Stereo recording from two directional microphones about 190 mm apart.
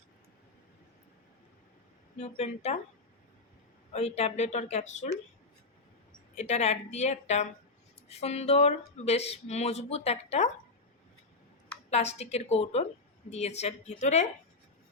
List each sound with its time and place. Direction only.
2.1 s speech: 35° left (ahead or behind)
3.9 s speech: 35° left (ahead or behind)
6.3 s speech: 35° left (ahead or behind)
11.9 s speech: 35° left (ahead or behind)